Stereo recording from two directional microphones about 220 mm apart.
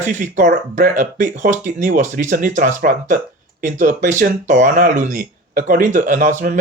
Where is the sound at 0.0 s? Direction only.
35° right (ahead or behind).